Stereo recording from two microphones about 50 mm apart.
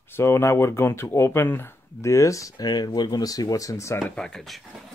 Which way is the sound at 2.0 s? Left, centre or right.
Left.